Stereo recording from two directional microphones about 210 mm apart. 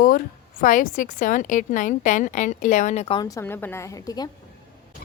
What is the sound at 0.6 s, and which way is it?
A woman's voice, 40° left (ahead or behind).